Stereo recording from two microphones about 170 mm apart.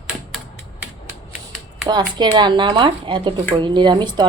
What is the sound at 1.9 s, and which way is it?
Speech, 25° right (ahead or behind).